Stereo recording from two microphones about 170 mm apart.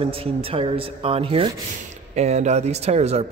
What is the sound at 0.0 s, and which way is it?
A man's voice, 35° right (ahead or behind).